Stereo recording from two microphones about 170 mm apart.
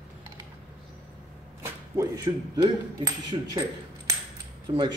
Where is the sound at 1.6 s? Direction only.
15° right (ahead or behind).